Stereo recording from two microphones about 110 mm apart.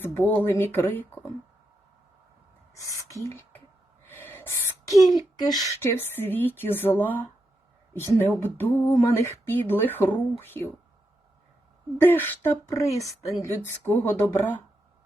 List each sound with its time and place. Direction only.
0.0 s speech: 20° left (ahead or behind)
2.7 s speech: 30° left (ahead or behind)
3.2 s a sound: 20° left (ahead or behind)
4.0 s gasp: 20° left (ahead or behind)
5.0 s speech: 40° left (ahead or behind); by 10.7 s 20° left (ahead or behind)
11.9 s speech: 20° left (ahead or behind)
12.6 s speech: 30° left (ahead or behind)
13.8 s speech: 20° left (ahead or behind)